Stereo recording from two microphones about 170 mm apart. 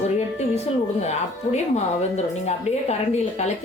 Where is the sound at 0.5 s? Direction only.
40° left (ahead or behind).